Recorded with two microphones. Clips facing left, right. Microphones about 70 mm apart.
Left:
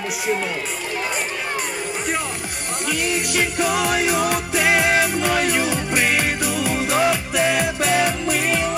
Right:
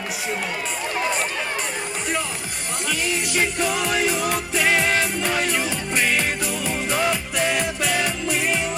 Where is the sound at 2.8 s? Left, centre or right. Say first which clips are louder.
Left 2 dB; centre.